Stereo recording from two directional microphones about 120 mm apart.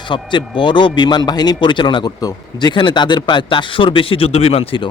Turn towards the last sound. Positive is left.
turn(degrees=50)  # may be behind; listen again after turning